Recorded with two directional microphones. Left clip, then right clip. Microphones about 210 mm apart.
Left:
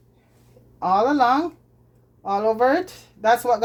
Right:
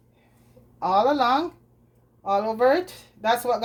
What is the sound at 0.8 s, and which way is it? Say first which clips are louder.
Speech: left 2 dB; 25° left (ahead or behind).